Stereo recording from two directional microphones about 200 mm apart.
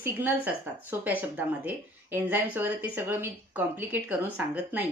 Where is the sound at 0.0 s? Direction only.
10° right (ahead or behind).